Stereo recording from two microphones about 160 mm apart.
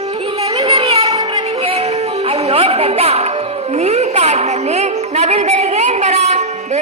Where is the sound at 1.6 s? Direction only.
40° right (ahead or behind).